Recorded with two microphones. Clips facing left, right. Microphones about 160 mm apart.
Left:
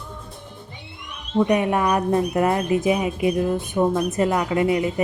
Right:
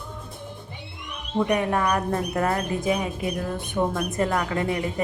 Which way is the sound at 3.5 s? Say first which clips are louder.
Left 5 dB; 10° left (ahead or behind).